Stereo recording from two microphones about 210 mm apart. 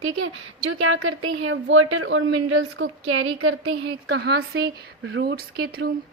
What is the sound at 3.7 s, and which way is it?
Speech, 55° right (ahead or behind).